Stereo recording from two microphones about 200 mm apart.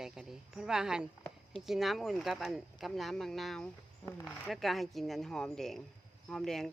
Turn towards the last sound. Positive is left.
turn(degrees=0)  # may be behind; listen again after turning